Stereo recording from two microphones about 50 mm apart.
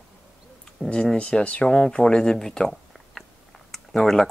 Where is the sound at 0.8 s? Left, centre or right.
Left.